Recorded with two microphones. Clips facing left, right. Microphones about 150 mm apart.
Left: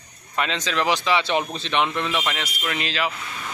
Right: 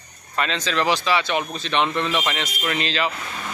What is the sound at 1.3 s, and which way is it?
Speech, 30° left (ahead or behind).